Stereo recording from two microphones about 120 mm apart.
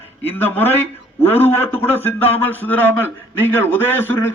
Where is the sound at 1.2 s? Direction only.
20° left (ahead or behind).